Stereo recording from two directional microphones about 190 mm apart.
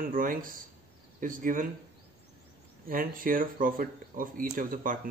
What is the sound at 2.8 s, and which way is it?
Speech, 50° right (ahead or behind).